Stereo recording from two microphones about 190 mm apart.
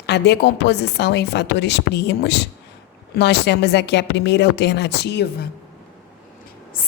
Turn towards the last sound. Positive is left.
turn(degrees=60)  # may be behind; listen again after turning